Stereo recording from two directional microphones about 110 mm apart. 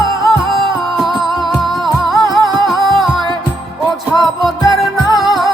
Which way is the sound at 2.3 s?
40° right (ahead or behind).